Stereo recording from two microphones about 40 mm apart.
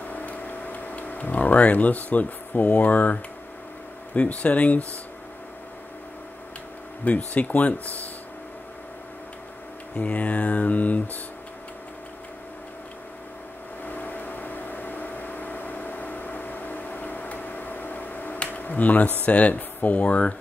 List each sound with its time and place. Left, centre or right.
0.0 s tick-tock: left
4.1 s speech: left
7.1 s speech: left
9.9 s speech: left
13.8 s vehicle: left
18.6 s speech: left